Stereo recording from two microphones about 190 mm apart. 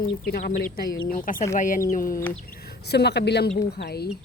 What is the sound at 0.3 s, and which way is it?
A woman's voice, 55° left (ahead or behind).